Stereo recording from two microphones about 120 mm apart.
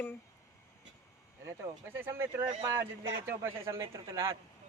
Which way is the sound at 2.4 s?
50° right (ahead or behind).